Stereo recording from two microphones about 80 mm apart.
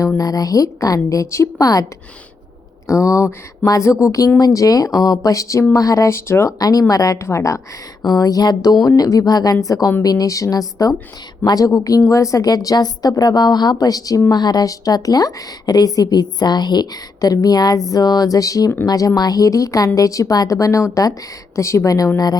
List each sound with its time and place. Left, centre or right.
0.2 s a woman's voice: left
6.6 s a woman's voice: left
8.0 s a woman's voice: left